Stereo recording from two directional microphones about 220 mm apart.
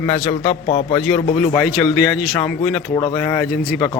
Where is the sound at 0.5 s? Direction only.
30° left (ahead or behind).